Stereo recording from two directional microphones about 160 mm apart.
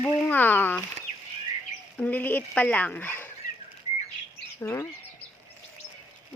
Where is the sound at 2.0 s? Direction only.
10° left (ahead or behind).